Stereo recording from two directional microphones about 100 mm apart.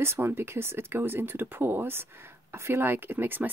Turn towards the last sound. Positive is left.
turn(degrees=-20)  # may be behind; listen again after turning